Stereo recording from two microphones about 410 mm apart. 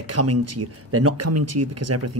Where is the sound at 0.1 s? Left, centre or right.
Right.